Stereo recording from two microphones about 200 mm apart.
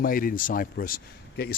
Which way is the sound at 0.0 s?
45° left (ahead or behind).